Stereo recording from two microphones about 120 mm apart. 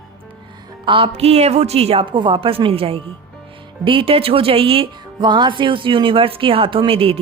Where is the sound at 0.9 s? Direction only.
50° right (ahead or behind).